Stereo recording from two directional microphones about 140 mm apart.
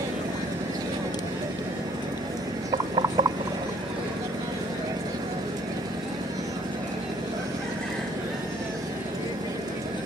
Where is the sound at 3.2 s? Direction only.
35° right (ahead or behind).